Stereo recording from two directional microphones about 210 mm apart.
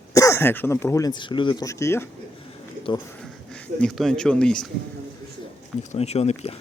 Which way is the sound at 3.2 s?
5° left (ahead or behind).